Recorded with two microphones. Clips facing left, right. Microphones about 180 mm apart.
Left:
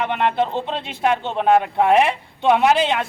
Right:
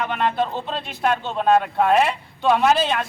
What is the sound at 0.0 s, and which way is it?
Speech, 20° left (ahead or behind).